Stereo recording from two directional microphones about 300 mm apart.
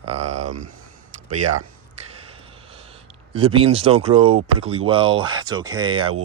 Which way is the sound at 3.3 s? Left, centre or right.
Centre.